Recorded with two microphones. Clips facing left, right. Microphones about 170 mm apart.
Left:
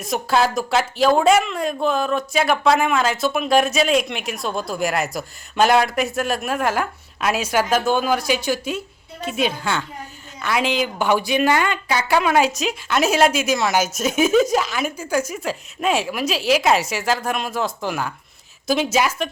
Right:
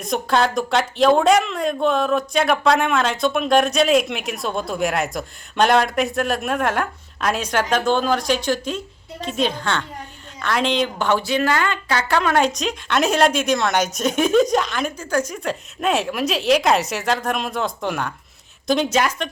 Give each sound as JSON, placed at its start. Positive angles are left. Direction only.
{"t": 0.0, "sound": "a woman's voice", "side_deg": 5}